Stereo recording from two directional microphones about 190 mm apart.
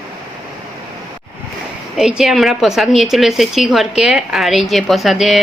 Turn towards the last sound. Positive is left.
turn(degrees=0)  # may be behind; listen again after turning